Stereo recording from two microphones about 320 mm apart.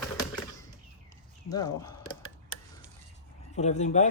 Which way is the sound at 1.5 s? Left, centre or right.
Centre.